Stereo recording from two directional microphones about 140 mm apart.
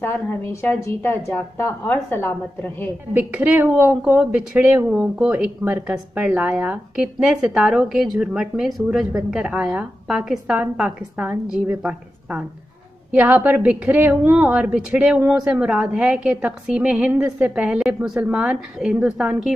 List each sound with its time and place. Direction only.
0.0 s a woman's voice: 15° left (ahead or behind)
3.2 s a woman's voice: 10° right (ahead or behind)